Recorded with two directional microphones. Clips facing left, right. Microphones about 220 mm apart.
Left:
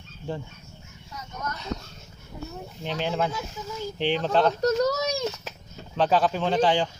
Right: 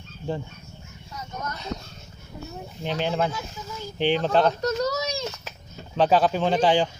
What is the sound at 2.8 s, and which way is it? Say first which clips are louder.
Speech: right 2 dB; centre (ahead or behind).